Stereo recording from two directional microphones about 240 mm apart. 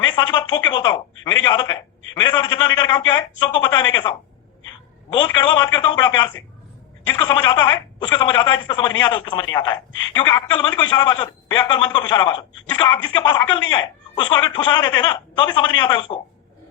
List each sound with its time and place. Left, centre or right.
0.1 s a man's voice: centre
5.1 s a man's voice: centre